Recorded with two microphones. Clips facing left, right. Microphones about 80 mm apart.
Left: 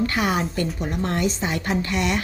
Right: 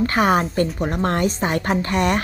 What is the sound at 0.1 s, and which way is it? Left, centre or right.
A woman's voice, right.